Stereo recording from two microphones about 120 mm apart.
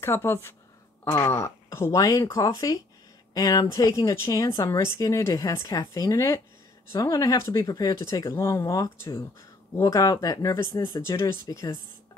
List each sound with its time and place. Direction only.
0.0 s speech: 20° left (ahead or behind)
11.4 s speech: 30° left (ahead or behind)